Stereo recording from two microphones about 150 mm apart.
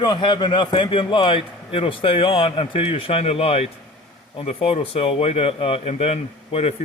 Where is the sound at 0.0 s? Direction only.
30° left (ahead or behind).